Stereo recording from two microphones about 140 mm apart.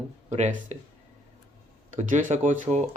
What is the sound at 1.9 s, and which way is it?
Speech, 65° right (ahead or behind).